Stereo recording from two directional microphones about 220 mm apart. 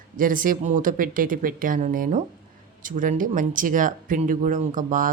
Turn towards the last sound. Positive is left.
turn(degrees=-35)  # may be behind; listen again after turning